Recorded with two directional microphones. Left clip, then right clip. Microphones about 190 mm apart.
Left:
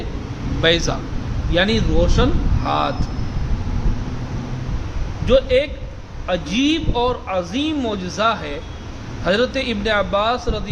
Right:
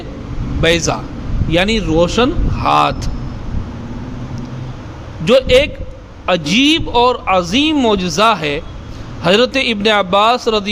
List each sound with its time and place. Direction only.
0.6 s a man's voice: 30° right (ahead or behind)
5.2 s a man's voice: 55° right (ahead or behind)